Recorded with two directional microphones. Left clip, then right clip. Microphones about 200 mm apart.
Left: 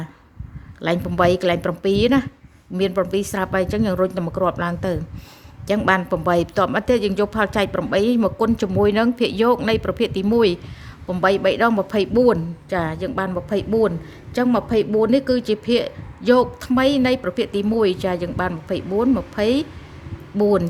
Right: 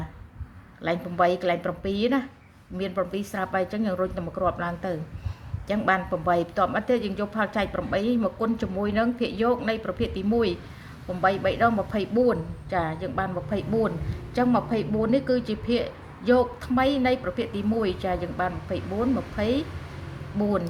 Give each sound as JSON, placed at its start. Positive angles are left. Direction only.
{"t": 0.8, "sound": "a woman's voice", "side_deg": 55}